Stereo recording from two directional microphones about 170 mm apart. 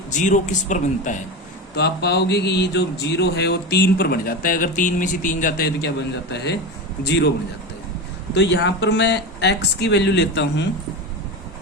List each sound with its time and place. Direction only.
0.1 s speech: 45° left (ahead or behind)
1.7 s a man's voice: 80° left
6.3 s speech: 80° left
8.3 s speech: 90° left